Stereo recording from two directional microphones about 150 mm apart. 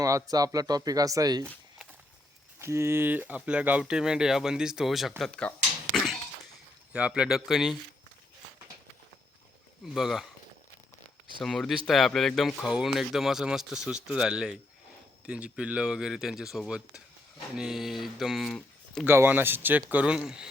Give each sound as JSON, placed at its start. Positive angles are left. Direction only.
{"t": 0.0, "sound": "speech", "side_deg": -25}
{"t": 2.6, "sound": "speech", "side_deg": -20}
{"t": 6.9, "sound": "speech", "side_deg": -5}
{"t": 9.8, "sound": "speech", "side_deg": 0}
{"t": 11.4, "sound": "speech", "side_deg": 5}
{"t": 19.0, "sound": "speech", "side_deg": -15}